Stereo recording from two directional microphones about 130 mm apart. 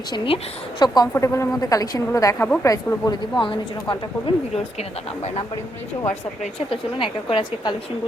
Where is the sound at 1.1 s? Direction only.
20° left (ahead or behind); by 3.9 s 40° left (ahead or behind).